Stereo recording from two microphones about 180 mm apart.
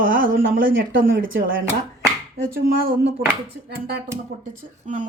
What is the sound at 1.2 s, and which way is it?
Speech, 50° right (ahead or behind).